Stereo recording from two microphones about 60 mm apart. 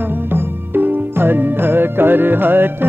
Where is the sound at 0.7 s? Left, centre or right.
Right.